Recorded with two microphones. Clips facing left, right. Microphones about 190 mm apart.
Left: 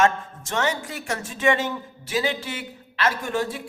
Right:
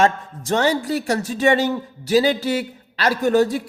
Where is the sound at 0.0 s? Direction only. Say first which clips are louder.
Right 3 dB; 35° right (ahead or behind).